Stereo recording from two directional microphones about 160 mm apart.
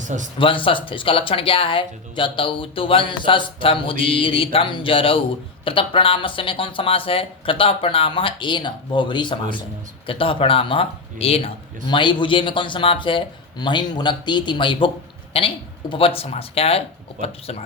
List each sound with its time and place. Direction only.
0.0 s speech: 50° right (ahead or behind)
0.3 s speech: 30° left (ahead or behind)